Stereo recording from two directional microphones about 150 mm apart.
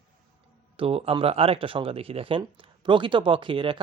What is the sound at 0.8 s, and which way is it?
Speech, 40° right (ahead or behind).